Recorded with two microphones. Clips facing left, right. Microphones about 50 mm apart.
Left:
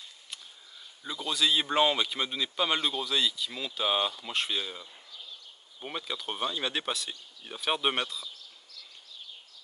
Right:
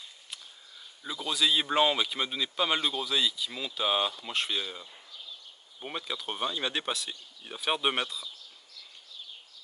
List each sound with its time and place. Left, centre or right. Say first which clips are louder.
1.0 s speech: even; centre